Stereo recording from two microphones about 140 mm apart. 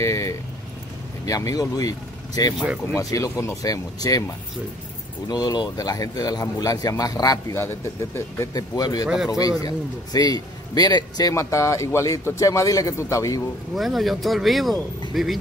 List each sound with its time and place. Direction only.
0.0 s a man's voice: 20° left (ahead or behind)
5.3 s a man's voice: 30° left (ahead or behind)
9.0 s speech: 5° right (ahead or behind)
9.6 s a man's voice: 25° left (ahead or behind)
13.7 s speech: centre (ahead or behind)